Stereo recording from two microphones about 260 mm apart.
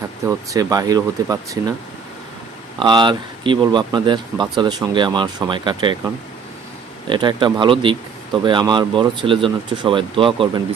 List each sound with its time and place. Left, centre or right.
0.3 s speech: centre
2.7 s speech: centre
7.1 s speech: centre